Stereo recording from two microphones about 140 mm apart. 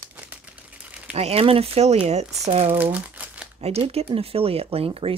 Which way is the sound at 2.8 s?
10° right (ahead or behind).